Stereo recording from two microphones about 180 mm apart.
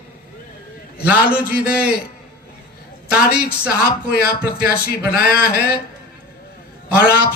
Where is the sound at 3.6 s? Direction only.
60° left (ahead or behind).